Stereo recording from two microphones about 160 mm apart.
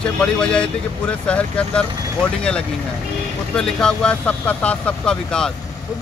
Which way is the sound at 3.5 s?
5° left (ahead or behind).